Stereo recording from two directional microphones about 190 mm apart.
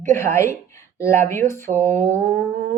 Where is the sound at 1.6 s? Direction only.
40° right (ahead or behind).